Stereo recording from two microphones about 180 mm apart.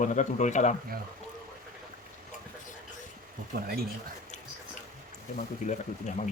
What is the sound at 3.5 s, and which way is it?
Speech, 55° right (ahead or behind).